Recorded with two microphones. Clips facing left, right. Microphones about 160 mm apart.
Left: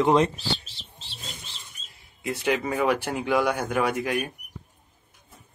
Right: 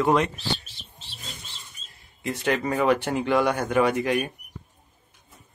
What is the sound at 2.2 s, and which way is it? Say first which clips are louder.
Speech: even; 10° left (ahead or behind).